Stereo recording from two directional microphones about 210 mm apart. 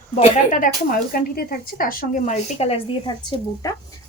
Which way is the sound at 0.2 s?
40° left (ahead or behind).